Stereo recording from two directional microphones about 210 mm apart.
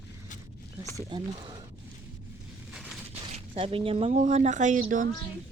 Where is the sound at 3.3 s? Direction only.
30° right (ahead or behind).